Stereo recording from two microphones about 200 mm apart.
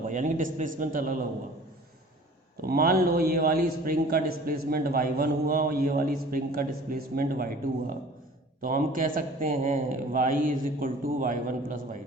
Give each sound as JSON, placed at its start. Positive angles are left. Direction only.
{"t": 0.1, "sound": "a man's voice", "side_deg": -40}
{"t": 2.6, "sound": "a man's voice", "side_deg": -50}